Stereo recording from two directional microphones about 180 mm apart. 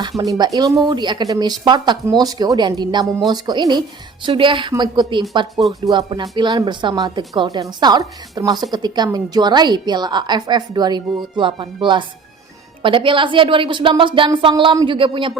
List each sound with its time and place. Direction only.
0.2 s a woman's voice: 20° right (ahead or behind)